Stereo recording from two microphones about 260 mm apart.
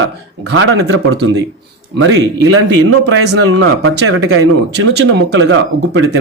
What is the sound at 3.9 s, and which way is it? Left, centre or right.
Speech, right.